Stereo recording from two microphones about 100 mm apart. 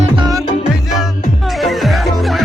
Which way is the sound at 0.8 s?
5° right (ahead or behind).